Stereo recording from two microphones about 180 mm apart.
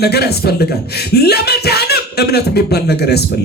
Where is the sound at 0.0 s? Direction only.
65° left (ahead or behind).